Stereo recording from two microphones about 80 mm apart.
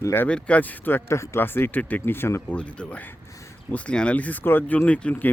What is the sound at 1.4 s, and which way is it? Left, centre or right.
Speech, left.